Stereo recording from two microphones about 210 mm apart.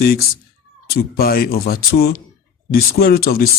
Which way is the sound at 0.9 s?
45° left (ahead or behind).